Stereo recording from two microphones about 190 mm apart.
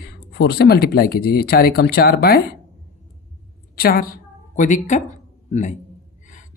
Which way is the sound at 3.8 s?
55° left (ahead or behind).